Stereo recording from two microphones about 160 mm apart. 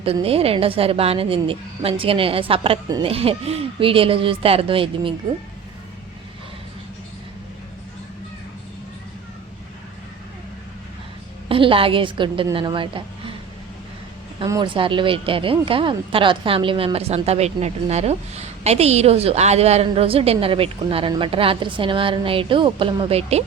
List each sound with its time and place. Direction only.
0.0 s speech: 35° right (ahead or behind)
11.4 s a woman's voice: 35° right (ahead or behind)
14.3 s speech: 25° right (ahead or behind)